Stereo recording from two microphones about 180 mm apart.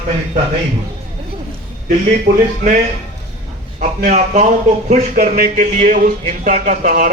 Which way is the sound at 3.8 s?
45° right (ahead or behind).